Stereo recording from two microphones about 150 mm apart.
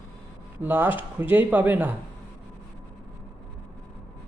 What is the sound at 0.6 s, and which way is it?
Speech, 15° right (ahead or behind).